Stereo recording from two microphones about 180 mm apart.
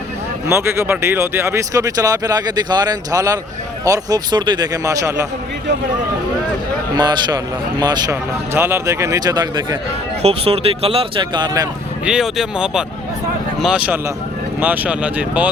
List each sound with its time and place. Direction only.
0.4 s speech: 15° right (ahead or behind)
6.9 s speech: 25° right (ahead or behind)
10.2 s speech: 35° right (ahead or behind)
12.0 s speech: centre (ahead or behind)